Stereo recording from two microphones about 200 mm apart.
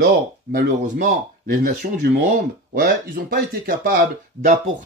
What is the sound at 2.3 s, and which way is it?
Speech, 45° right (ahead or behind).